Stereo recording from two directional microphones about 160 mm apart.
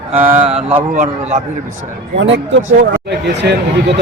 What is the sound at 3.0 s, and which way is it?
Speech, 90° right.